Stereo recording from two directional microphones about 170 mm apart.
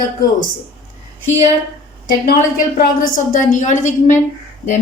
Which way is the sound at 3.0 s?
50° left (ahead or behind).